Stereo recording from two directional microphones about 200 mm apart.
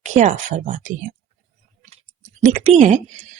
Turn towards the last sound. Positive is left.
turn(degrees=-35)  # may be behind; listen again after turning